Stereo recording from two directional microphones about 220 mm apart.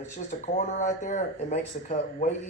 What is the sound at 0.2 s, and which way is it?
Speech, 35° left (ahead or behind).